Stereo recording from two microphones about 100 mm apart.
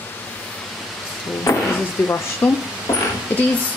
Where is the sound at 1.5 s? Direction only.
30° left (ahead or behind).